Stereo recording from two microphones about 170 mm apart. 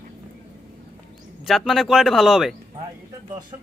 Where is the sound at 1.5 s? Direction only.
Centre (ahead or behind).